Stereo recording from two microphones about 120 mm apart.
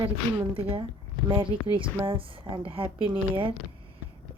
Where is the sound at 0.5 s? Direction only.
50° right (ahead or behind).